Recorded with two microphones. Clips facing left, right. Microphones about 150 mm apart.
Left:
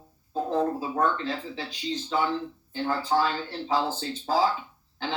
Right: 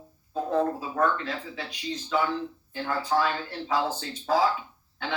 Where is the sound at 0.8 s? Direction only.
30° left (ahead or behind).